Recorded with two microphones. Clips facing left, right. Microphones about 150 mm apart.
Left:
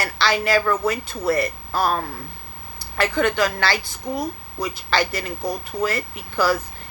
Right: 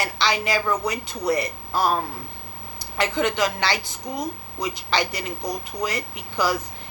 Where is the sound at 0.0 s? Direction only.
20° right (ahead or behind).